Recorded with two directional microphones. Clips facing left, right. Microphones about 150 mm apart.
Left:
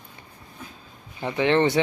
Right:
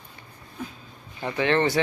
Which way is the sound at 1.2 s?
15° left (ahead or behind).